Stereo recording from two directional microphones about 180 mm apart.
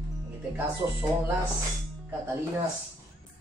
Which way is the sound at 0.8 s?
15° right (ahead or behind).